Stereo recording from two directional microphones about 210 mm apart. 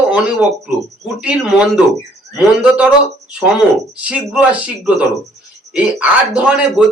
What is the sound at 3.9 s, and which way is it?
A man's voice, 5° right (ahead or behind).